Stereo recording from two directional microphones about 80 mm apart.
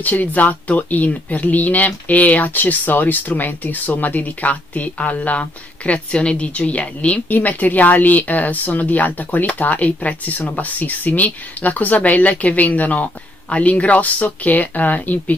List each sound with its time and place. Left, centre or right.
0.0 s speech: left